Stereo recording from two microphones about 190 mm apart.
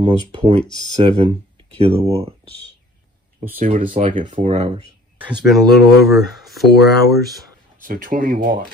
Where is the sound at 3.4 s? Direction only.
40° right (ahead or behind).